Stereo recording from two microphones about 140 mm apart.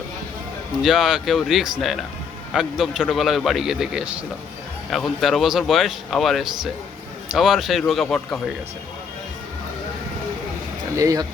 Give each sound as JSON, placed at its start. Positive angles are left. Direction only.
{"t": 0.8, "sound": "speech", "side_deg": -5}
{"t": 10.9, "sound": "speech", "side_deg": -25}